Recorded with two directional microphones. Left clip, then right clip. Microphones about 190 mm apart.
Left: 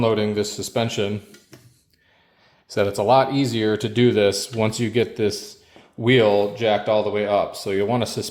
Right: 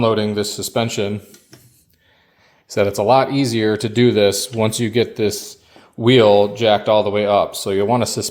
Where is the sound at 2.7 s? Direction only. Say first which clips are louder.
Right 3 dB; 20° right (ahead or behind).